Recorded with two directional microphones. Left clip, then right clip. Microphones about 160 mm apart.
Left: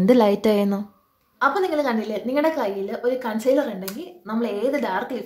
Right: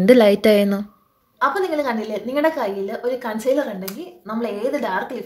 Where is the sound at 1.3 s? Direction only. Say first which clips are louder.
Right 1 dB; 10° left (ahead or behind).